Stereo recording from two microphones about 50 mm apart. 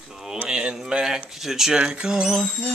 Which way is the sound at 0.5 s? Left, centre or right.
Centre.